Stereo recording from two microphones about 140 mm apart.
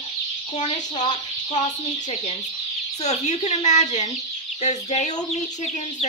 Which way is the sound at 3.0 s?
55° left (ahead or behind).